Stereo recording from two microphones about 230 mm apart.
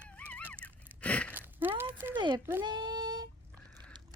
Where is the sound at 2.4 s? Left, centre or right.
Centre.